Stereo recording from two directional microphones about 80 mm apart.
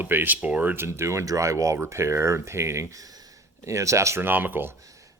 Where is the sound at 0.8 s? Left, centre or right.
Right.